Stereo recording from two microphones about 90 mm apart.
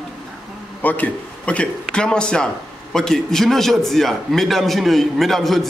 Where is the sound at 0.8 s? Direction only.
15° left (ahead or behind).